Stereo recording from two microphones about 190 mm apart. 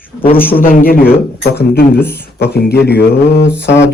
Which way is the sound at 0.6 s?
50° left (ahead or behind).